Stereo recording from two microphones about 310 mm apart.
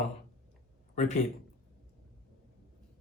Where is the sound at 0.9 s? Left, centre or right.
Left.